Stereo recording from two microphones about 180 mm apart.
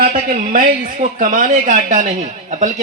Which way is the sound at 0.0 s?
50° right (ahead or behind).